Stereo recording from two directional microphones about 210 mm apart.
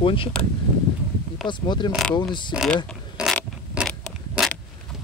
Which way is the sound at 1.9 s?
Centre (ahead or behind).